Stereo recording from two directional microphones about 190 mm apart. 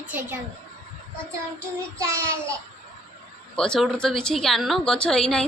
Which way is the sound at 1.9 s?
15° right (ahead or behind).